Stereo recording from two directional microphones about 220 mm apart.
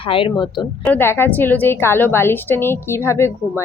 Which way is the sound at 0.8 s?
10° left (ahead or behind).